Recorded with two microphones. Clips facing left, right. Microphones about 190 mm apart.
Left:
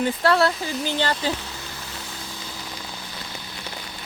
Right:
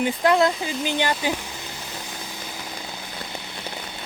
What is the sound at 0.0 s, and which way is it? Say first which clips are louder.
Speech: right 1 dB; 15° right (ahead or behind).